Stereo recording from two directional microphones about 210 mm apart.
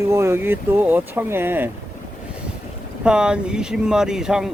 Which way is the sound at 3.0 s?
5° right (ahead or behind).